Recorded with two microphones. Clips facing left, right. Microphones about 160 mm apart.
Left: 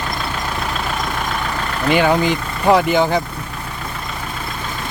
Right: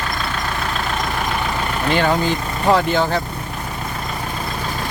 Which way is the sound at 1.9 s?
10° left (ahead or behind).